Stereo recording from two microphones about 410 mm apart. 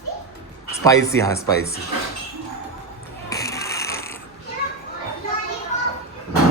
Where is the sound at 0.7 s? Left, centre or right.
Centre.